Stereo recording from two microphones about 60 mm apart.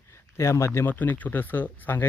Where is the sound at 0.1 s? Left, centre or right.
Left.